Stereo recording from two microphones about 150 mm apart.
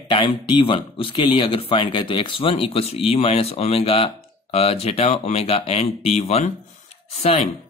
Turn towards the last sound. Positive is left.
turn(degrees=45)  # may be behind; listen again after turning